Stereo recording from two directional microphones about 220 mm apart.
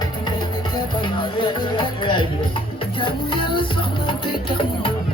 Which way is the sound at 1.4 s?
20° left (ahead or behind).